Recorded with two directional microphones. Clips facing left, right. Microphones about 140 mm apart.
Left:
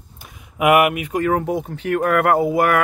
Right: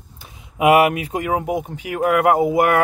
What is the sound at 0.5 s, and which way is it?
Speech, 30° right (ahead or behind).